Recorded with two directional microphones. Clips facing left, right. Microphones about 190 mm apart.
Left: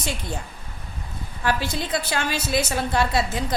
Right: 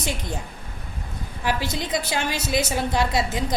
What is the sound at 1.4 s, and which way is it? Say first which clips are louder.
A woman's voice: left 1 dB; 20° right (ahead or behind).